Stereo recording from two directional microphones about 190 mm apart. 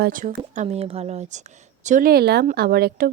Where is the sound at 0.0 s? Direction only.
45° right (ahead or behind).